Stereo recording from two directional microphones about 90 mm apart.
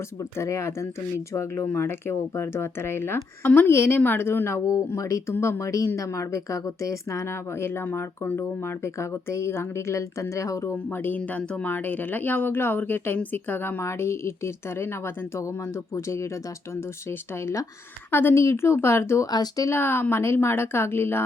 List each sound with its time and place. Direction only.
0.2 s speech: 35° left (ahead or behind)
10.8 s speech: 20° left (ahead or behind)
19.3 s speech: 50° left (ahead or behind)
19.6 s speech: 25° left (ahead or behind)